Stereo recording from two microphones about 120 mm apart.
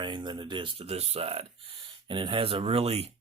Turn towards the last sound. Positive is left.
turn(degrees=-55)  # may be behind; listen again after turning